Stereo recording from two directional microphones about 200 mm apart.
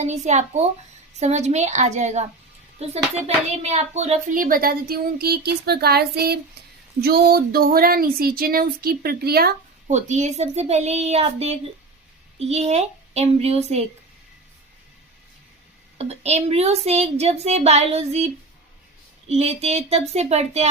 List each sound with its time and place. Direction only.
0.0 s speech: 35° right (ahead or behind); by 9.6 s 50° right (ahead or behind)
9.8 s speech: 35° right (ahead or behind)
16.0 s speech: 30° right (ahead or behind)
19.3 s speech: 30° right (ahead or behind)